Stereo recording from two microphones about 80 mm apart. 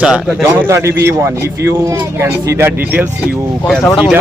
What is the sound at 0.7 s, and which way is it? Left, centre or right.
Speech, right.